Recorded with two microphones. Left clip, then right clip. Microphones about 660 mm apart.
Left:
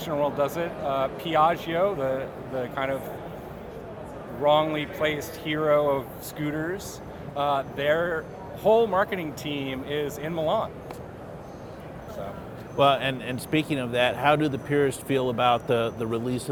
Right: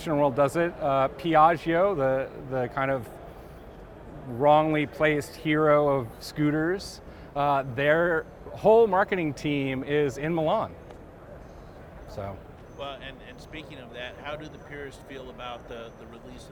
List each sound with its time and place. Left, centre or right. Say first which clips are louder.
0.0 s speech: right 2 dB; right
4.4 s speech: right 1 dB; right
12.7 s speech: left 17 dB; left